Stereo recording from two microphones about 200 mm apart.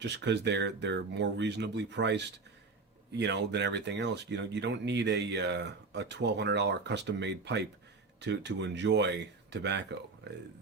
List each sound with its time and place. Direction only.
0.0 s speech: 60° right (ahead or behind)